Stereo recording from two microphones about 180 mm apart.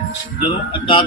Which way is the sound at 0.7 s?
30° left (ahead or behind).